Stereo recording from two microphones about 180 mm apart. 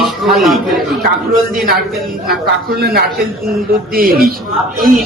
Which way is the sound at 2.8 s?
60° right (ahead or behind).